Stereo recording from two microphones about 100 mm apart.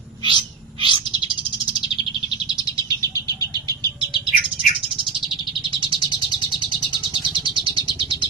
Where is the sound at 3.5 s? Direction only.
45° right (ahead or behind).